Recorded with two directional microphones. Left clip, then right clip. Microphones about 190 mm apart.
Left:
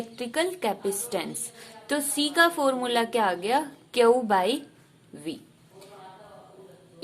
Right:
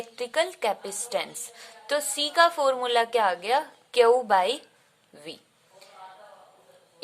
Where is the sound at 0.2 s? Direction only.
20° right (ahead or behind).